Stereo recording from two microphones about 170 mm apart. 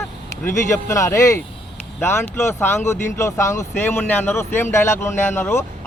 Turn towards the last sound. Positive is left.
turn(degrees=15)  # may be behind; listen again after turning